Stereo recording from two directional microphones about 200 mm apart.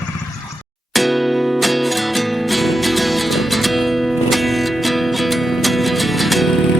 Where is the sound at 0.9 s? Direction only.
Centre (ahead or behind).